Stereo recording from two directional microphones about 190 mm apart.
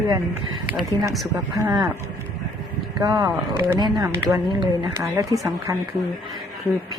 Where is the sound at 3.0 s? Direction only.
20° right (ahead or behind).